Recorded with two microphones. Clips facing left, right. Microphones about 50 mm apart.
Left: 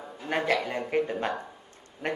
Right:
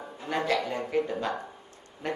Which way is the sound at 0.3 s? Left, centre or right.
Left.